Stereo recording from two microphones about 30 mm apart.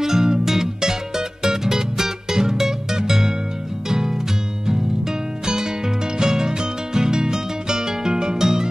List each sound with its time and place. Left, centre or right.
0.0 s music: centre
6.1 s music: right
8.4 s music: centre